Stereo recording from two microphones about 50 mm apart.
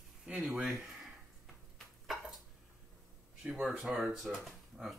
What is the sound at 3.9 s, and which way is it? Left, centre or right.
Speech, centre.